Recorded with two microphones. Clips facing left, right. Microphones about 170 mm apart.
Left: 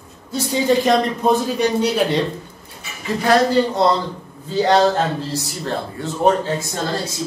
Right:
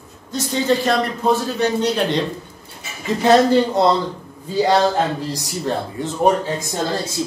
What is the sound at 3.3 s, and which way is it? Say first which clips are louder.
Speech: right 2 dB; 25° right (ahead or behind).